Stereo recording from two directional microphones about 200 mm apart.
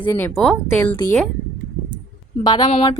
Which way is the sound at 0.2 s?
10° left (ahead or behind).